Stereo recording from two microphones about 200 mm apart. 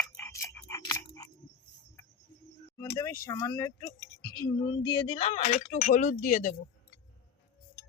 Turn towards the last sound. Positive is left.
turn(degrees=40)  # may be behind; listen again after turning